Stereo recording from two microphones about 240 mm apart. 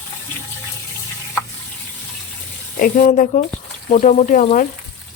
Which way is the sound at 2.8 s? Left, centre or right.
Left.